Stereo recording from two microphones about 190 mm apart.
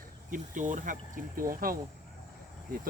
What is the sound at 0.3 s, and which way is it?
Speech, 40° right (ahead or behind).